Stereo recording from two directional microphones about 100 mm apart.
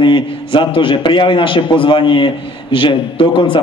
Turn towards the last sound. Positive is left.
turn(degrees=60)  # may be behind; listen again after turning